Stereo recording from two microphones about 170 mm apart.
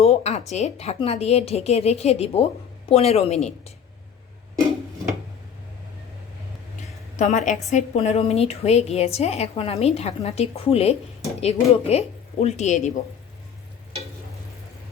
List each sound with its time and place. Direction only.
0.0 s a woman's voice: 40° left (ahead or behind)
7.2 s a woman's voice: 45° left (ahead or behind)